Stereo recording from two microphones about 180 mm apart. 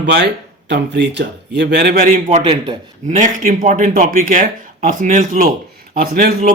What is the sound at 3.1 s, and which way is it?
Speech, 45° right (ahead or behind).